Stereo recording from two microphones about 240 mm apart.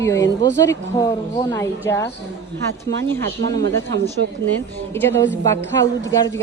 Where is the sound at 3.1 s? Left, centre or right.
Centre.